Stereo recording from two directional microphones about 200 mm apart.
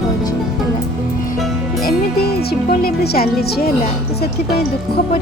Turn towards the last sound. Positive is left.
turn(degrees=50)  # may be behind; listen again after turning